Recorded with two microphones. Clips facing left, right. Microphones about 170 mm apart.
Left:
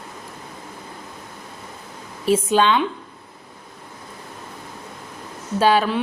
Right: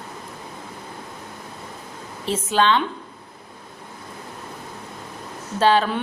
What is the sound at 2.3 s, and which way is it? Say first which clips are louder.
Speech: left 3 dB; 15° left (ahead or behind).